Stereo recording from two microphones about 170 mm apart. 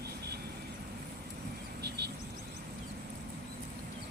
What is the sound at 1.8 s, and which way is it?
Vehicle, 75° right (ahead or behind).